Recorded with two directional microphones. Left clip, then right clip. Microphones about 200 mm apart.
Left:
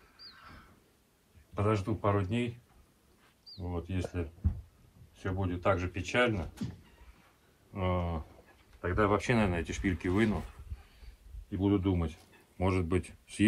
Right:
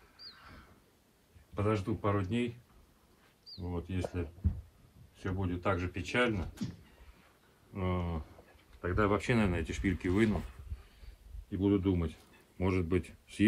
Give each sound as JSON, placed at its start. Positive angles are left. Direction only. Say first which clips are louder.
{"t": 1.5, "sound": "speech", "louder": "left 2 dB", "side_deg": 0}
{"t": 3.5, "sound": "speech", "louder": "left 1 dB", "side_deg": -5}
{"t": 7.7, "sound": "speech", "louder": "left 4 dB", "side_deg": 0}
{"t": 11.5, "sound": "speech", "louder": "even", "side_deg": 0}